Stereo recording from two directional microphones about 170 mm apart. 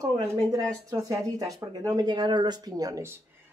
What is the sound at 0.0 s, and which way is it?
Speech, 20° right (ahead or behind).